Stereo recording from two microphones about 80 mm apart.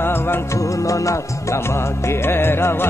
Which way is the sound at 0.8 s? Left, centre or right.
Left.